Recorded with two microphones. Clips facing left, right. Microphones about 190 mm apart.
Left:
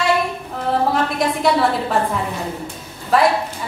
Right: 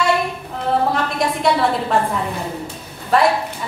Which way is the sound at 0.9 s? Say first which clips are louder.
Left 1 dB; centre (ahead or behind).